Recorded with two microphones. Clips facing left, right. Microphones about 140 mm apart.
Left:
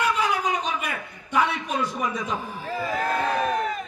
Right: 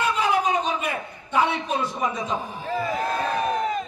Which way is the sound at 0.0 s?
30° right (ahead or behind).